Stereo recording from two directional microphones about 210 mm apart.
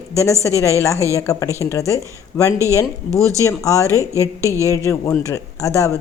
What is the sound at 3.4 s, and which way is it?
Speech, 15° left (ahead or behind).